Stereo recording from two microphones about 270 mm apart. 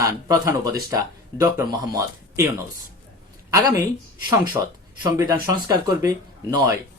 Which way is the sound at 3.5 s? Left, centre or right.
Centre.